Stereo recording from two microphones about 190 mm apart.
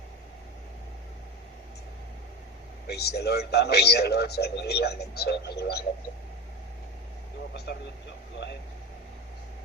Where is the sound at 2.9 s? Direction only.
60° left (ahead or behind).